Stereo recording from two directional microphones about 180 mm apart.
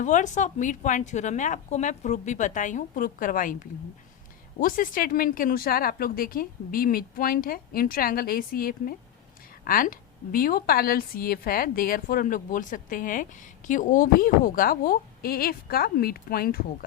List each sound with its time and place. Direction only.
0.0 s a woman's voice: 45° left (ahead or behind)
4.6 s a woman's voice: 50° left (ahead or behind)